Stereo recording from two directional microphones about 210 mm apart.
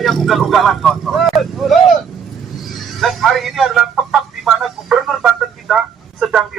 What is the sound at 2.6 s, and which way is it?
Chicken, centre (ahead or behind).